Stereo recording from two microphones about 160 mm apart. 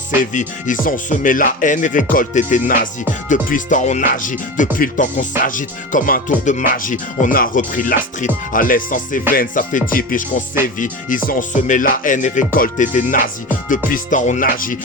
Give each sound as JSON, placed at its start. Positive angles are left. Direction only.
{"t": 0.2, "sound": "music", "side_deg": 55}